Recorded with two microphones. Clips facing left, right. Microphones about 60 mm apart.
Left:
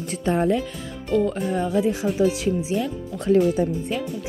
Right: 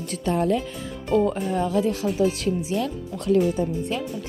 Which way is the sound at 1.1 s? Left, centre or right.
Centre.